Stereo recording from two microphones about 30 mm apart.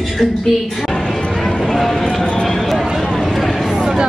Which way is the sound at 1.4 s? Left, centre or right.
Centre.